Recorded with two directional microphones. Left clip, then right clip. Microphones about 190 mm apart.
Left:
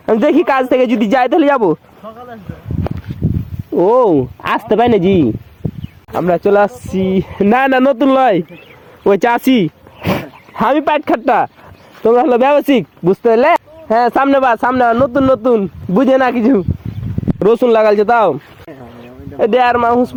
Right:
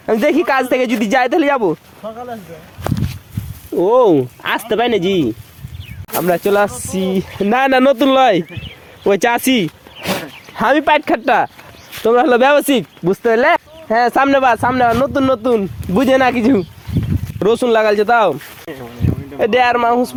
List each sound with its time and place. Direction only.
0.0 s speech: 45° left (ahead or behind)
3.8 s speech: 30° left (ahead or behind)
13.9 s speech: 35° left (ahead or behind)
17.4 s speech: 40° left (ahead or behind)
19.4 s speech: 35° left (ahead or behind)